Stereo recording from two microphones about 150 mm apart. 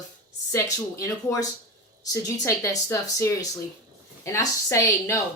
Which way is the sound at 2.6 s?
20° left (ahead or behind).